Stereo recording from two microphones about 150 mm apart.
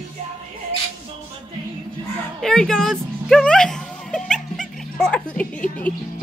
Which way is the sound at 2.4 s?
5° left (ahead or behind).